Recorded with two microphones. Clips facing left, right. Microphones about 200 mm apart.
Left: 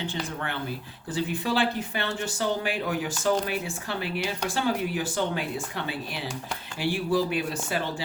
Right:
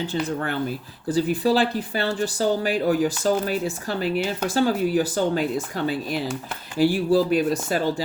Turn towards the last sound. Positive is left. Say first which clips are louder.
# right 8 dB
turn(degrees=-40)  # may be behind; listen again after turning